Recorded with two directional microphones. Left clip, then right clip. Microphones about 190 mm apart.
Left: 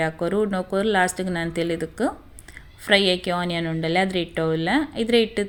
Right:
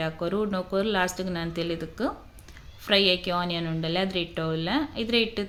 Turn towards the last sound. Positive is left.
turn(degrees=25)  # may be behind; listen again after turning